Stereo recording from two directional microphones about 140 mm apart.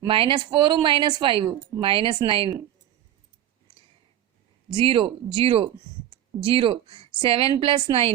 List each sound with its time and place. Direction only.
0.1 s a woman's voice: 35° right (ahead or behind)
4.7 s a woman's voice: 35° right (ahead or behind)